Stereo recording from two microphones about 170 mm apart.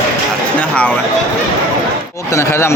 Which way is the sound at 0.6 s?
10° left (ahead or behind).